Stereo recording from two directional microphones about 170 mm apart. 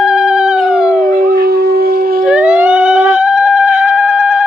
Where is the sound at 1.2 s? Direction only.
65° right (ahead or behind).